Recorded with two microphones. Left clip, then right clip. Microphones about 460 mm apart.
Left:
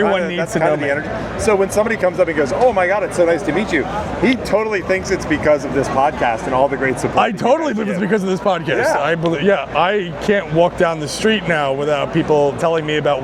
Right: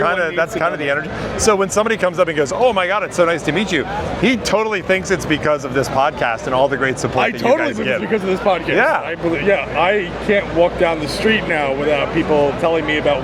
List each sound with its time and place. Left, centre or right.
0.2 s speech: right
6.0 s speech: right
7.2 s speech: left